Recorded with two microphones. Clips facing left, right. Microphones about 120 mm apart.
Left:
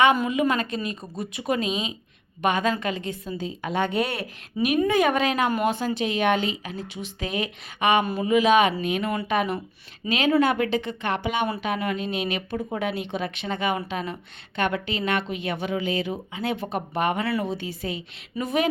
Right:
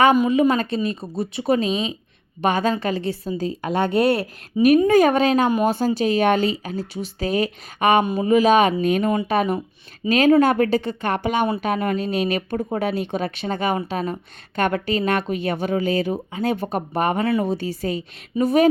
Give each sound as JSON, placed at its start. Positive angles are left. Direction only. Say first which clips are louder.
{"t": 0.3, "sound": "speech", "louder": "right 6 dB", "side_deg": -30}
{"t": 4.6, "sound": "speech", "louder": "right 9 dB", "side_deg": -20}
{"t": 4.9, "sound": "speech", "louder": "right 6 dB", "side_deg": -40}